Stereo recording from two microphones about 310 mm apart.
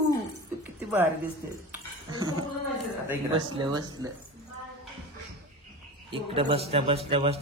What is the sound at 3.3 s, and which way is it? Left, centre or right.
Speech, centre.